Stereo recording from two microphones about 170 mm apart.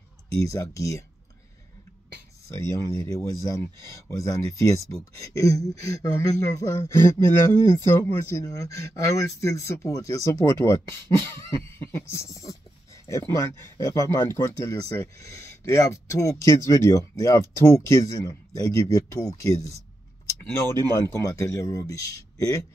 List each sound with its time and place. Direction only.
0.4 s speech: 20° left (ahead or behind)
2.4 s speech: 15° left (ahead or behind)
20.9 s speech: 15° left (ahead or behind)